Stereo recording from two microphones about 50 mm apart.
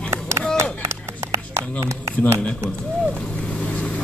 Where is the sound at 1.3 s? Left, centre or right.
Right.